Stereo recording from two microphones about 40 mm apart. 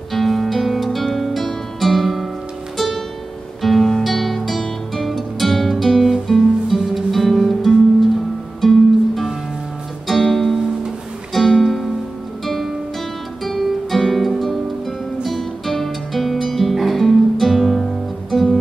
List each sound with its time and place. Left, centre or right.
0.1 s music: centre
3.6 s music: centre